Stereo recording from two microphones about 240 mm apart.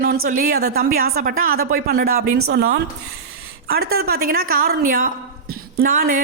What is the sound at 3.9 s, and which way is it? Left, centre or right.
A woman's voice, right.